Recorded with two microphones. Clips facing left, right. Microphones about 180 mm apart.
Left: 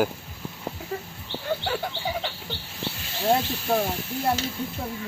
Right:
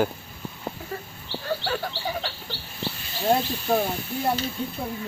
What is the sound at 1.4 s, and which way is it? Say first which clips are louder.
Fowl: even; 15° left (ahead or behind).